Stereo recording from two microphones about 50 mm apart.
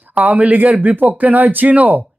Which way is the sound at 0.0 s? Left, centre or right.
Right.